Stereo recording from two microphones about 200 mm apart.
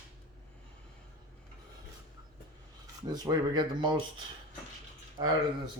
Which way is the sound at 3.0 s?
20° right (ahead or behind).